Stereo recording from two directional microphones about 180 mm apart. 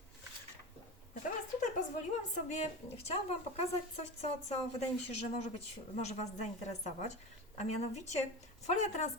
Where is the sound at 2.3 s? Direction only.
40° left (ahead or behind).